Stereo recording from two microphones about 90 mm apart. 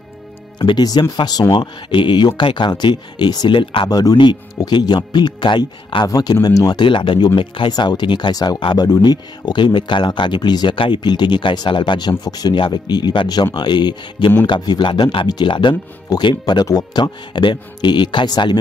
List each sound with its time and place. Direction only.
0.6 s speech: 60° left (ahead or behind)
0.8 s speech: 45° left (ahead or behind)
1.5 s speech: 60° left (ahead or behind)
3.5 s speech: 70° left (ahead or behind)
3.9 s speech: 45° left (ahead or behind); by 6.0 s 60° left (ahead or behind)
6.0 s speech: 45° left (ahead or behind)
6.8 s speech: 65° left (ahead or behind)